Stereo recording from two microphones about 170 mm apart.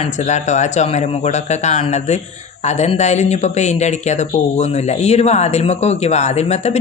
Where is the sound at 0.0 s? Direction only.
45° left (ahead or behind).